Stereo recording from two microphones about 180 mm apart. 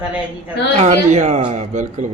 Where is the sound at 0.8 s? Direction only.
40° right (ahead or behind).